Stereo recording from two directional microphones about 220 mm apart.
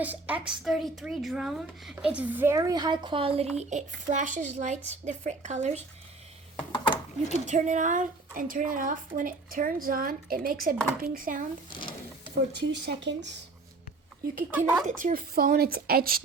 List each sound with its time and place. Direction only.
0.0 s a woman's voice: 5° right (ahead or behind); by 5.8 s 30° right (ahead or behind)
6.6 s a sound: 25° left (ahead or behind)
7.4 s a woman's voice: 35° right (ahead or behind)
11.7 s sewing machine: 20° left (ahead or behind)
12.5 s speech: 50° right (ahead or behind)
14.8 s speech: 35° right (ahead or behind)